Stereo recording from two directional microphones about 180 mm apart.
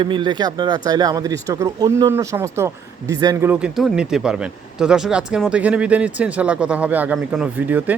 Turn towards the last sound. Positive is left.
turn(degrees=-10)  # may be behind; listen again after turning